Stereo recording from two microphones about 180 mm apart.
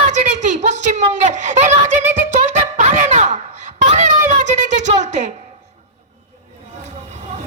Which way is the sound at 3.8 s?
40° right (ahead or behind).